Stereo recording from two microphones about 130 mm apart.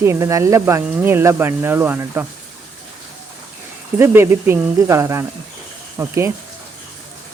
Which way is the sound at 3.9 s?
20° right (ahead or behind).